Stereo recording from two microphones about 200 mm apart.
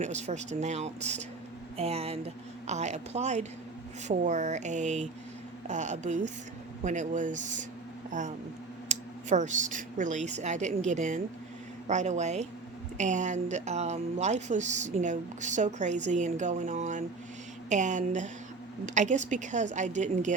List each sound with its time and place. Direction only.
0.0 s a woman's voice: 35° right (ahead or behind)